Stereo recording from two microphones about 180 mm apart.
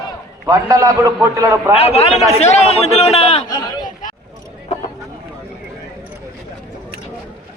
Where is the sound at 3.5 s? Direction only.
25° left (ahead or behind).